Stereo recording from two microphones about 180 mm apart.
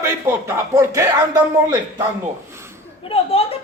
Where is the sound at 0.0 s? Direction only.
15° right (ahead or behind).